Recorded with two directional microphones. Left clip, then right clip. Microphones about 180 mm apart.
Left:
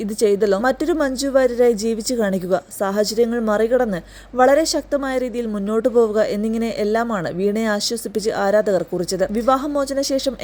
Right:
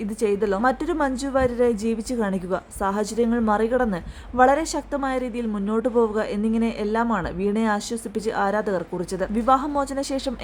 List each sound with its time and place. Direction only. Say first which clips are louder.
0.2 s a woman's voice: left 5 dB; 25° left (ahead or behind)